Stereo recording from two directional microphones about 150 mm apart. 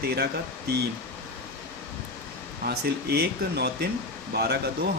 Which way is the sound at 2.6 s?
90° right.